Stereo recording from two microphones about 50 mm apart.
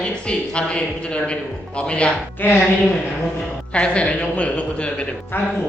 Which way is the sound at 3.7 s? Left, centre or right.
Left.